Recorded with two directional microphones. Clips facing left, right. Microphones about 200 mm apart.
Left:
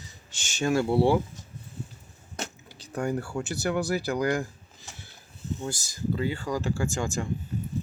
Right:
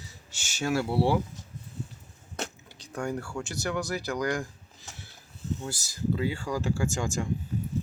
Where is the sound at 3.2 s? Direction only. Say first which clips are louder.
Left 3 dB; 20° left (ahead or behind).